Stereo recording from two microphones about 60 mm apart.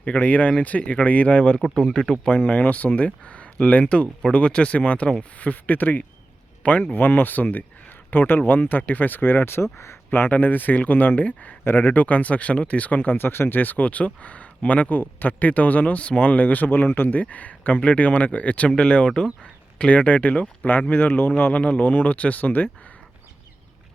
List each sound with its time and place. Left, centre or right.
0.0 s speech: left
1.6 s speech: centre; by 11.5 s left
11.6 s speech: left